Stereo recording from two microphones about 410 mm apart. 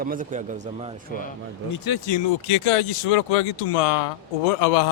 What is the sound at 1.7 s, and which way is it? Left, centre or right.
Speech, left.